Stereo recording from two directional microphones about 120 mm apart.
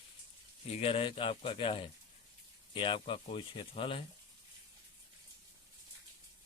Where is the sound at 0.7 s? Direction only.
50° left (ahead or behind).